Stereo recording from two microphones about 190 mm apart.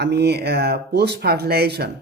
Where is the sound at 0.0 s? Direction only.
60° right (ahead or behind).